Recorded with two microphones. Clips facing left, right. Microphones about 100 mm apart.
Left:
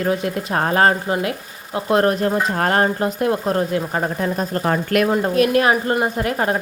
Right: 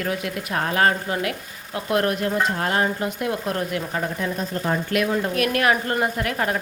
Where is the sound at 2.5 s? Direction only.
50° left (ahead or behind).